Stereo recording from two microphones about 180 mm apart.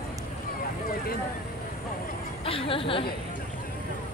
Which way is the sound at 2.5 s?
30° left (ahead or behind).